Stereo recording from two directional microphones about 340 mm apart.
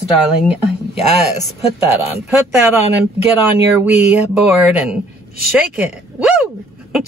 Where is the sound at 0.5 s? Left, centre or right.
Centre.